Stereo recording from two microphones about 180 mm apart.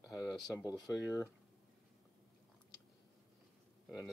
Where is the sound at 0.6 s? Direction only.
20° left (ahead or behind).